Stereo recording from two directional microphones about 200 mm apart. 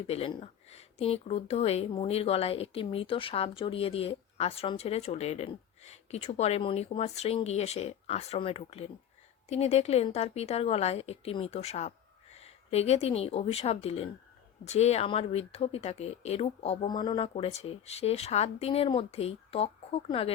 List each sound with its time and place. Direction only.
0.1 s speech: 25° left (ahead or behind)